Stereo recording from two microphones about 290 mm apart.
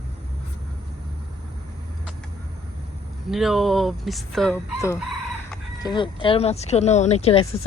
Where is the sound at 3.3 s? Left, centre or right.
Centre.